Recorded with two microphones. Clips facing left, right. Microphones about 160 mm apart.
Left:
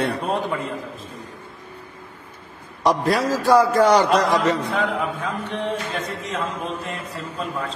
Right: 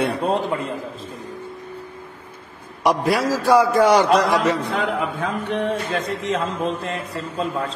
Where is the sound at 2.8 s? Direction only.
10° right (ahead or behind).